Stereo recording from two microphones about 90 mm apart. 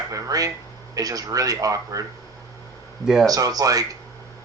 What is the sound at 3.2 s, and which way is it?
Speech, 45° right (ahead or behind).